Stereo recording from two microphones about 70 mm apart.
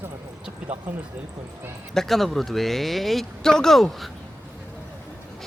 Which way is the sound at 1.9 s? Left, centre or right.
Centre.